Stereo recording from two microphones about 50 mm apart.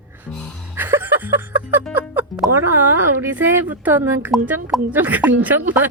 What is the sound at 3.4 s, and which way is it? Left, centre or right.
Speech, right.